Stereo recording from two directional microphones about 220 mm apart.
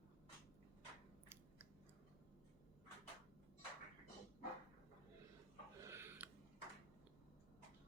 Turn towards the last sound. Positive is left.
turn(degrees=-10)  # may be behind; listen again after turning